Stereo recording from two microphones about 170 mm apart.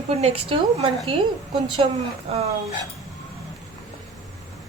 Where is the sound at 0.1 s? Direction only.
40° right (ahead or behind).